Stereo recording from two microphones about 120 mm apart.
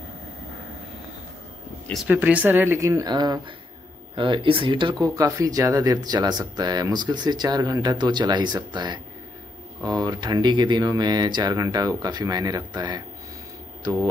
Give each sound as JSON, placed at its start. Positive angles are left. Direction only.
{"t": 2.0, "sound": "speech", "side_deg": -10}
{"t": 4.1, "sound": "speech", "side_deg": -45}
{"t": 5.0, "sound": "speech", "side_deg": -30}